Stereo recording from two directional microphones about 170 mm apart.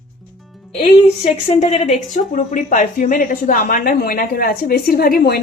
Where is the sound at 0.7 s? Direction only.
35° left (ahead or behind).